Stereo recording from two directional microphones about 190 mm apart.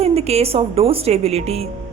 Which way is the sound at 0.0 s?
30° right (ahead or behind).